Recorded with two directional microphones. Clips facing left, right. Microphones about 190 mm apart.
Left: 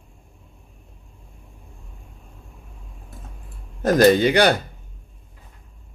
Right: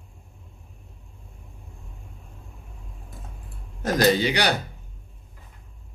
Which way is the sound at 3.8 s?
50° left (ahead or behind).